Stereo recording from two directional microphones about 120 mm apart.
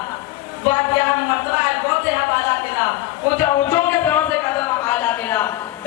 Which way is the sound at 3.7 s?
15° left (ahead or behind).